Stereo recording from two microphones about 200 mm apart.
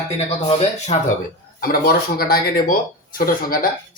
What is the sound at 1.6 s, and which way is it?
Speech, 50° left (ahead or behind).